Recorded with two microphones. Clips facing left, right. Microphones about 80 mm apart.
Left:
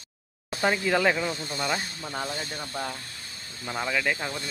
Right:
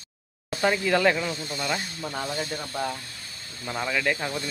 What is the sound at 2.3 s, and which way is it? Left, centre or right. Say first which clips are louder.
Speech: right 3 dB; centre.